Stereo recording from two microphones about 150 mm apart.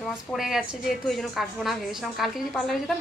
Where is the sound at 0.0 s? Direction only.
Centre (ahead or behind).